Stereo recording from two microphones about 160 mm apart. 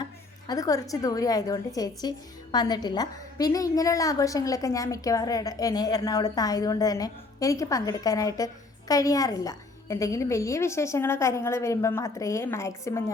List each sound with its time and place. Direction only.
0.0 s a woman's voice: 25° left (ahead or behind)